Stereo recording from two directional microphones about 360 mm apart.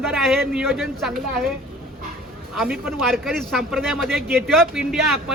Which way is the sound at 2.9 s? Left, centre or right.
Centre.